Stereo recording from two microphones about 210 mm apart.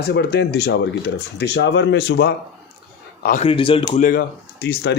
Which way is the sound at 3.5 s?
25° left (ahead or behind).